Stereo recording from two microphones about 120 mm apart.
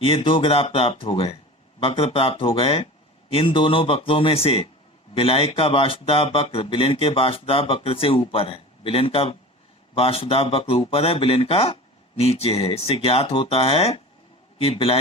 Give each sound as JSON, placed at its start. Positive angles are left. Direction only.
{"t": 0.0, "sound": "speech", "side_deg": 50}